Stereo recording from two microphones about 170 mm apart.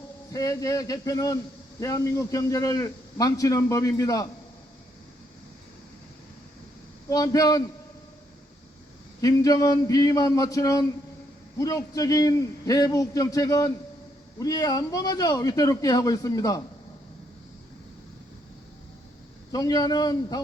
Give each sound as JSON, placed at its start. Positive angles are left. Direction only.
{"t": 0.3, "sound": "a man's voice", "side_deg": 20}
{"t": 7.1, "sound": "a man's voice", "side_deg": 20}
{"t": 9.2, "sound": "a man's voice", "side_deg": 20}
{"t": 19.5, "sound": "a man's voice", "side_deg": 20}